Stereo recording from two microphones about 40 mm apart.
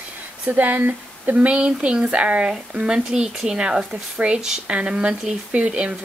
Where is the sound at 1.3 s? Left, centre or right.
Right.